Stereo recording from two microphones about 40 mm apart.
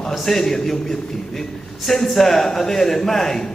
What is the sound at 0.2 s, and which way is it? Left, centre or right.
A man's voice, centre.